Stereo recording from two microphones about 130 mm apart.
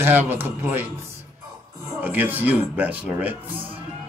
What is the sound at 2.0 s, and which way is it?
Speech, 15° right (ahead or behind).